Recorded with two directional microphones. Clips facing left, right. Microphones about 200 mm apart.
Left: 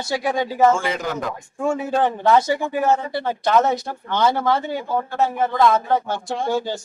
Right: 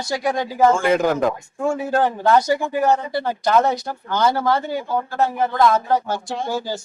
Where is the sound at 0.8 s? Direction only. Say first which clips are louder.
Right 7 dB; 55° right (ahead or behind).